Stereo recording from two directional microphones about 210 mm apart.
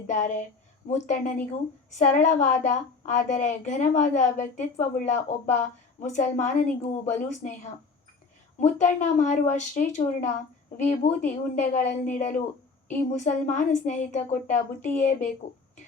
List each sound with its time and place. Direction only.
0.1 s a woman's voice: 35° left (ahead or behind)